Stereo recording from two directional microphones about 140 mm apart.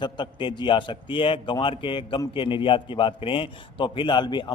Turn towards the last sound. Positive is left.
turn(degrees=30)  # may be behind; listen again after turning